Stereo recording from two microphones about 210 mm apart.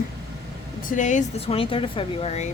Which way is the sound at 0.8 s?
35° left (ahead or behind).